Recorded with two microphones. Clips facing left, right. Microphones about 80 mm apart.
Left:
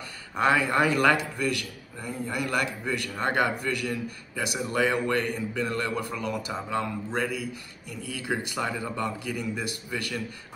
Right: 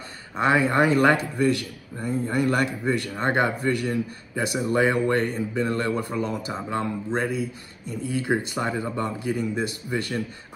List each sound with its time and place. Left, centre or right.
0.4 s a man's voice: right